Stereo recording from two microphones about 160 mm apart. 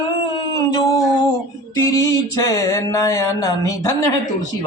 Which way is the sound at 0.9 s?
25° left (ahead or behind).